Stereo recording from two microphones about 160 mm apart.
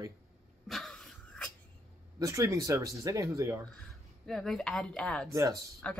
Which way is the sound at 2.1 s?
20° right (ahead or behind).